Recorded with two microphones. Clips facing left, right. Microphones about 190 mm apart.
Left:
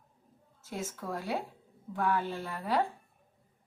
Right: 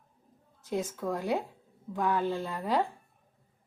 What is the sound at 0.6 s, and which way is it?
A woman's voice, 15° right (ahead or behind).